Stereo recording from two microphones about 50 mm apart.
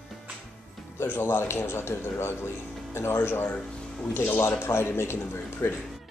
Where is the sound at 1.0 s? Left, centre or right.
Left.